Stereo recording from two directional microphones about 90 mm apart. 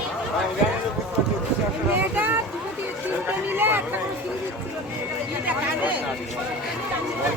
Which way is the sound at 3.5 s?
25° right (ahead or behind).